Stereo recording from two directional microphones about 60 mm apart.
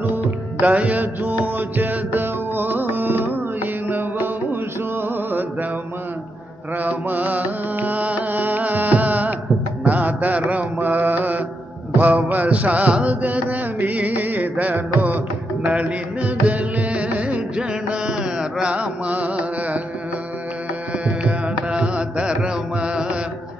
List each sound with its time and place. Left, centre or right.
0.1 s music: right
5.0 s music: right
6.8 s music: right
10.5 s mantra: right
12.0 s music: right
21.2 s music: centre